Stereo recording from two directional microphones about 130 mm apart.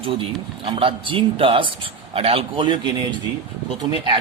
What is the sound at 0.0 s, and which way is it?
Speech, 45° right (ahead or behind).